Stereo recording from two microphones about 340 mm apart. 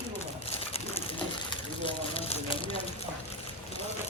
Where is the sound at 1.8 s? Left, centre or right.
Centre.